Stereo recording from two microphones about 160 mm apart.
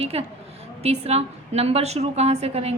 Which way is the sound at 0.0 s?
40° right (ahead or behind).